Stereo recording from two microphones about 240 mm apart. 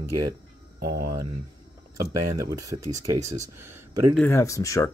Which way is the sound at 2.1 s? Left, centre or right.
Right.